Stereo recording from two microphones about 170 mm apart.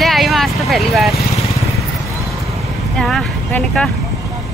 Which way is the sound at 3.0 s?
5° left (ahead or behind).